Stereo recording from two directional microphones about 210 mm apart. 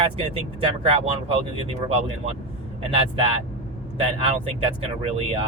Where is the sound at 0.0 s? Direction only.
25° right (ahead or behind).